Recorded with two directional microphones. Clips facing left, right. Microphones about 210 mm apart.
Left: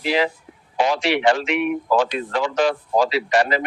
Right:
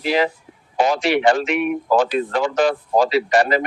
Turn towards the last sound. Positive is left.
turn(degrees=-45)  # may be behind; listen again after turning